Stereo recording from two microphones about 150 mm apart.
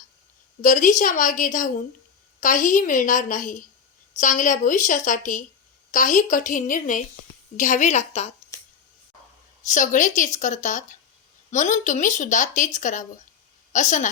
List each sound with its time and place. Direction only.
0.6 s a woman's voice: 60° left (ahead or behind)
9.6 s speech: 55° left (ahead or behind)